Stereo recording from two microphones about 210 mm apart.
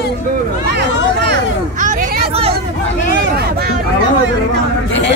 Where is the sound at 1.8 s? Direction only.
40° right (ahead or behind).